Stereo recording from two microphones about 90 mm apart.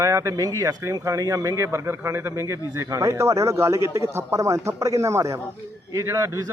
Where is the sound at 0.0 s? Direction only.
35° right (ahead or behind).